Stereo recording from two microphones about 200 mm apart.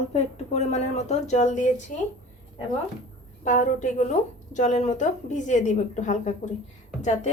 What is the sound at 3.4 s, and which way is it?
A woman's voice, 40° left (ahead or behind).